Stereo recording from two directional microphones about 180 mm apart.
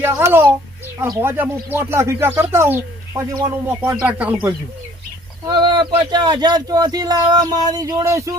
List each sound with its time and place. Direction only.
0.0 s speech: 10° right (ahead or behind)
5.5 s speech: 25° right (ahead or behind)